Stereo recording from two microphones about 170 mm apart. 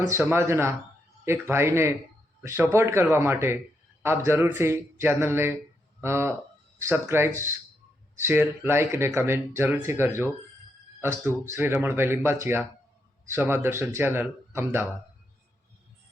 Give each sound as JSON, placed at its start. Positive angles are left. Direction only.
{"t": 0.1, "sound": "speech", "side_deg": -15}